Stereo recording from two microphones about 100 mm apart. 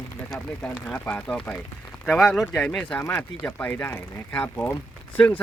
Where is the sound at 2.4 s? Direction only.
15° left (ahead or behind).